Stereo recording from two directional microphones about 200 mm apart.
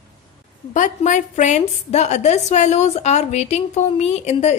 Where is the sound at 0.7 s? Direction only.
40° left (ahead or behind).